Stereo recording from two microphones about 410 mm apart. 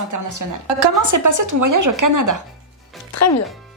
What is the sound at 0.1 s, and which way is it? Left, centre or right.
Speech, right.